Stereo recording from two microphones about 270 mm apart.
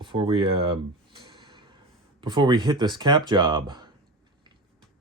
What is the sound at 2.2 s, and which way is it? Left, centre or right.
Speech, centre.